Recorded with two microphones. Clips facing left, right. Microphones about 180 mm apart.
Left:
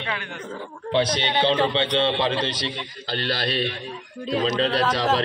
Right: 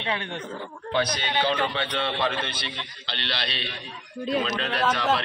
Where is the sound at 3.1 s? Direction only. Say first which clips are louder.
Left 7 dB; 45° left (ahead or behind).